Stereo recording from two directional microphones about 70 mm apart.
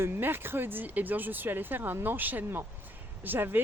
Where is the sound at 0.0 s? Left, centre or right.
Right.